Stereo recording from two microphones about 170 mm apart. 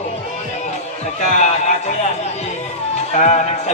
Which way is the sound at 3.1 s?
40° left (ahead or behind).